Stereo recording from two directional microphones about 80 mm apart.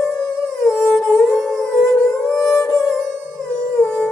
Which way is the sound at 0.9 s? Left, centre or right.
Centre.